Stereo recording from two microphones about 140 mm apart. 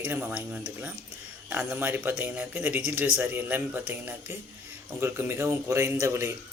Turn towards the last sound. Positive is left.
turn(degrees=-20)  # may be behind; listen again after turning